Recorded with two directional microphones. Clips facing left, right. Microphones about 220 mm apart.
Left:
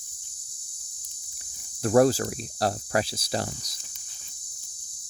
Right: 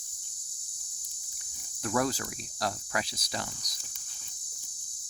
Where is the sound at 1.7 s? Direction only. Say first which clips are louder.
Left 10 dB; 35° left (ahead or behind).